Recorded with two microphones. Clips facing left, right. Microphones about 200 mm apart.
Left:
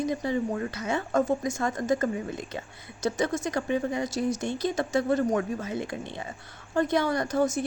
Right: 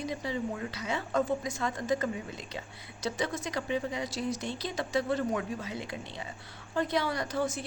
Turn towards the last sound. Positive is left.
turn(degrees=45)  # may be behind; listen again after turning